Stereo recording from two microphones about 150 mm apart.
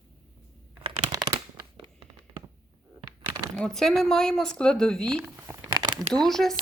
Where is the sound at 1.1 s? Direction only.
25° right (ahead or behind).